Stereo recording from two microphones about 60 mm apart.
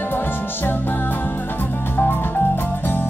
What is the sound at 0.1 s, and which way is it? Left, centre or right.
Music, left.